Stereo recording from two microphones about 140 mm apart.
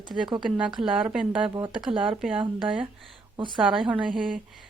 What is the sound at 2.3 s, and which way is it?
Speech, 40° right (ahead or behind).